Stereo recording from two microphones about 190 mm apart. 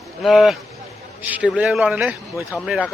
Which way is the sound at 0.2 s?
Centre (ahead or behind).